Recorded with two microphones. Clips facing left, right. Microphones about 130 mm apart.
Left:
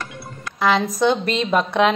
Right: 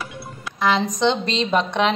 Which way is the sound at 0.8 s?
5° left (ahead or behind).